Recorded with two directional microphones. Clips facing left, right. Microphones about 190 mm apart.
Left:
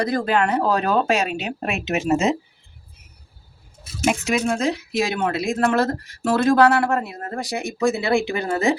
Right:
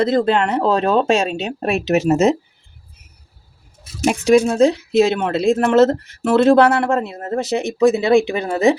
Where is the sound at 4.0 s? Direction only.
35° right (ahead or behind).